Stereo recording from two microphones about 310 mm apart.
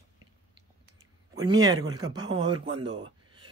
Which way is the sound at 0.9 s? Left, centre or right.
Centre.